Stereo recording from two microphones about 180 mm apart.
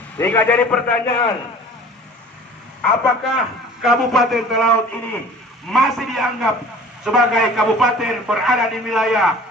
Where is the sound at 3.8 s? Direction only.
Centre (ahead or behind).